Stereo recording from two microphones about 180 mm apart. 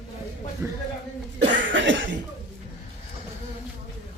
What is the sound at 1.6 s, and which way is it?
Cough, 90° right.